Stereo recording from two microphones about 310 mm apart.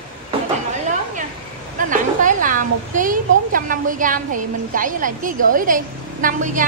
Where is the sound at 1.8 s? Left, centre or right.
Right.